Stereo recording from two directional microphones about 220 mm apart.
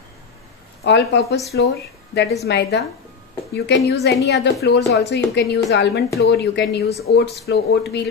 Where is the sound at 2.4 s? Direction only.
50° left (ahead or behind).